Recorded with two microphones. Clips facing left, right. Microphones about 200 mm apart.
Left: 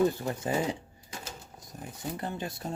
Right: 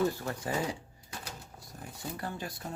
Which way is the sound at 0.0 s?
20° left (ahead or behind).